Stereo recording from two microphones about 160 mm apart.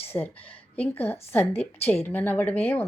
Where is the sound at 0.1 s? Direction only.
15° left (ahead or behind).